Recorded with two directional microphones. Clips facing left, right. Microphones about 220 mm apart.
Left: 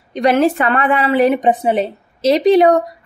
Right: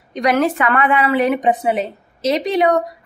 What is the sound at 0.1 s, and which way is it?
A woman's voice, 30° left (ahead or behind).